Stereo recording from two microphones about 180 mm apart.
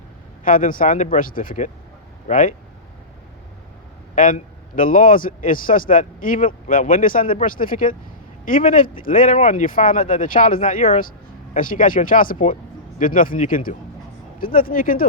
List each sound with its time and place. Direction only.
0.4 s a man's voice: 50° left (ahead or behind)
4.1 s a man's voice: 45° left (ahead or behind)